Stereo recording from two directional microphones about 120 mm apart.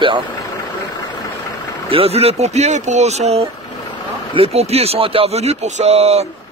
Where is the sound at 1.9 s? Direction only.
55° right (ahead or behind).